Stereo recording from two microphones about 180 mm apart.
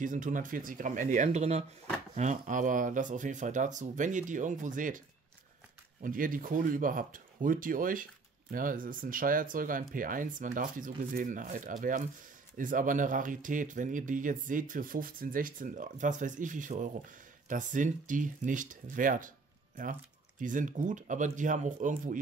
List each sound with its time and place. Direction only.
0.0 s speech: 45° right (ahead or behind)
6.0 s speech: 50° right (ahead or behind)